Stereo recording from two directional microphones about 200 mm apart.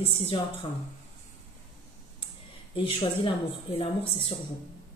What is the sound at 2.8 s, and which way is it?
Speech, 25° left (ahead or behind).